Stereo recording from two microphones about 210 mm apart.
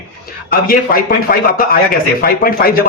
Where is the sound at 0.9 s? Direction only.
45° left (ahead or behind).